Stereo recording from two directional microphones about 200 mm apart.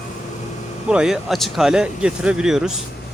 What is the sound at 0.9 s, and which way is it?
Speech, 5° right (ahead or behind).